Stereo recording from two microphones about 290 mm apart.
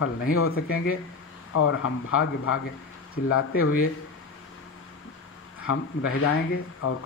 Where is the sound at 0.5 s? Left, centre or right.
Left.